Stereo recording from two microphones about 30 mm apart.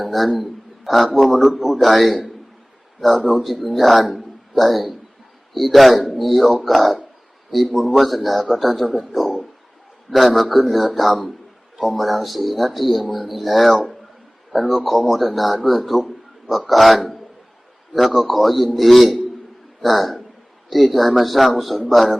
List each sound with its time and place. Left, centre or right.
0.0 s a man's voice: centre
3.4 s a man's voice: centre
9.1 s a sound: centre
10.1 s a man's voice: centre